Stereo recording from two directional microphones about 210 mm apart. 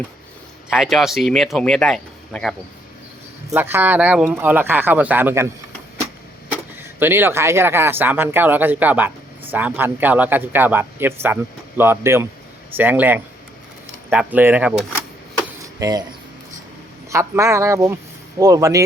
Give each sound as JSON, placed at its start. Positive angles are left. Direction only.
{"t": 0.7, "sound": "speech", "side_deg": 0}
{"t": 3.5, "sound": "speech", "side_deg": -10}
{"t": 7.0, "sound": "speech", "side_deg": -10}
{"t": 15.8, "sound": "speech", "side_deg": -15}
{"t": 17.1, "sound": "speech", "side_deg": -15}